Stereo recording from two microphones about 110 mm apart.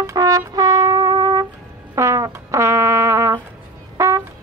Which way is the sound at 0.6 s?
30° right (ahead or behind).